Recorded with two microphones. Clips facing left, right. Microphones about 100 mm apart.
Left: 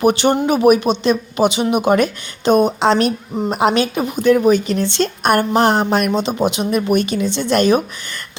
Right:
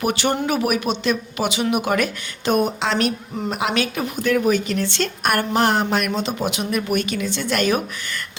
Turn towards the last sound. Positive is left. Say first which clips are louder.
# left 6 dB
turn(degrees=25)  # may be behind; listen again after turning